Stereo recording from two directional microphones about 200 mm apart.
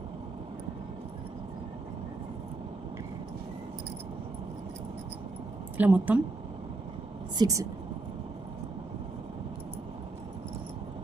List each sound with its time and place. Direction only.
5.7 s a woman's voice: 5° right (ahead or behind)
7.3 s speech: 15° right (ahead or behind)